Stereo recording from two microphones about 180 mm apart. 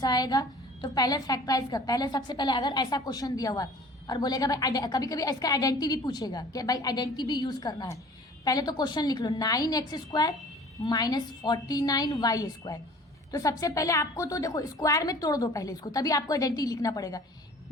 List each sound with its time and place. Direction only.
0.0 s a woman's voice: 20° left (ahead or behind)